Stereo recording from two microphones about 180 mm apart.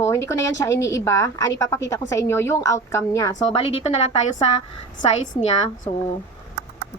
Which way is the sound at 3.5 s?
30° left (ahead or behind).